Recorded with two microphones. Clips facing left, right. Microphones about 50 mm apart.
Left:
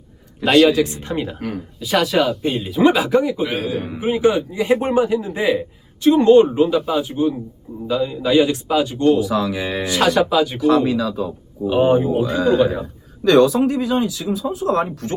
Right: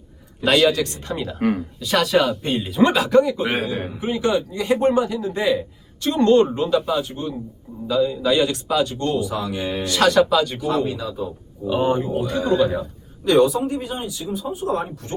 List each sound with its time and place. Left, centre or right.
0.4 s a man's voice: centre
0.8 s speech: left
1.4 s speech: centre
1.8 s a man's voice: centre
10.6 s speech: left
11.6 s a man's voice: centre
13.2 s speech: left